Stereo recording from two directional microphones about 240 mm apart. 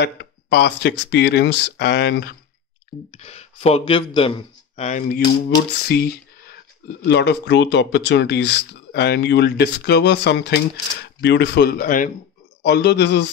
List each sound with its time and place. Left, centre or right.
0.0 s speech: left
3.1 s speech: left
5.9 s speech: left